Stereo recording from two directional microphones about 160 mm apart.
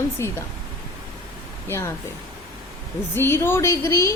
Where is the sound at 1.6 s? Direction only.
15° left (ahead or behind).